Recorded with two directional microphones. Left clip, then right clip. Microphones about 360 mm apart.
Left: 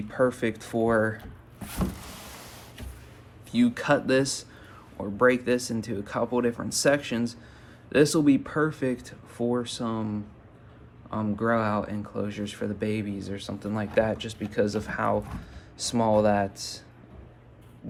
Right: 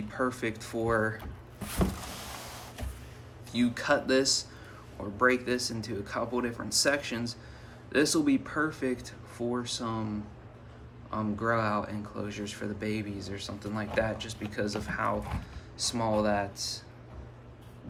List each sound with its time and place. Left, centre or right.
0.1 s speech: centre
3.5 s speech: centre
11.1 s speech: centre